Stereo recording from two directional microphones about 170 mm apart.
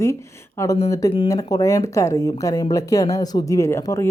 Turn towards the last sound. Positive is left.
turn(degrees=15)  # may be behind; listen again after turning